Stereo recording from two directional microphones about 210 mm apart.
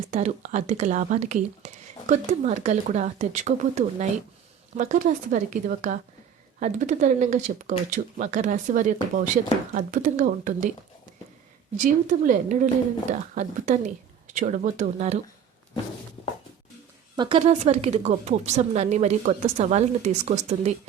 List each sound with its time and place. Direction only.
0.1 s speech: 35° right (ahead or behind)
11.8 s speech: 40° right (ahead or behind)
17.2 s speech: 25° right (ahead or behind)